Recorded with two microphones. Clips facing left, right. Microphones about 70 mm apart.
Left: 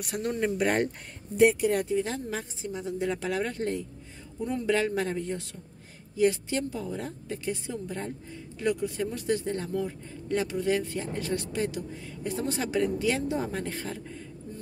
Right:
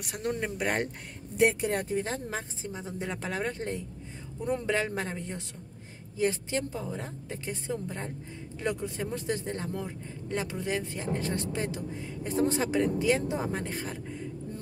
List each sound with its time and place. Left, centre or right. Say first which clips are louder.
0.1 s speech: left 3 dB; centre
1.3 s speech: left 4 dB; right